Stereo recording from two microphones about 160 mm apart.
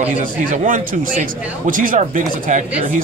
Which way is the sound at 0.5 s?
55° right (ahead or behind).